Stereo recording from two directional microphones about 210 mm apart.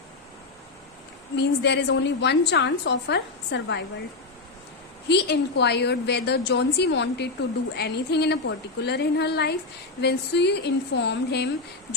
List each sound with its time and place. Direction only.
1.4 s a woman's voice: 55° left (ahead or behind)
5.0 s a woman's voice: 55° left (ahead or behind)